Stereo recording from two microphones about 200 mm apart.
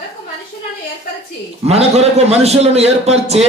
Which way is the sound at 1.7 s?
30° right (ahead or behind).